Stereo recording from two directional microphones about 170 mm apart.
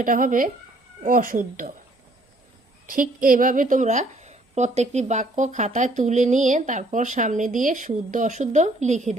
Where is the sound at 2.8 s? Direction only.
55° right (ahead or behind).